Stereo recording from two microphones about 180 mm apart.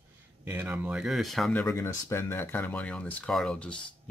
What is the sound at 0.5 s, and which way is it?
Speech, 10° right (ahead or behind).